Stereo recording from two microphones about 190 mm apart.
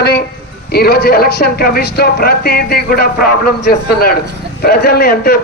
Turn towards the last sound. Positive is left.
turn(degrees=55)  # may be behind; listen again after turning